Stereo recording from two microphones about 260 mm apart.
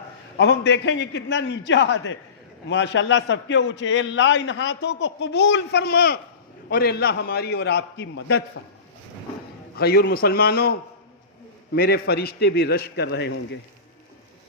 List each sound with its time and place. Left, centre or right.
0.3 s a man's voice: left
9.7 s a man's voice: left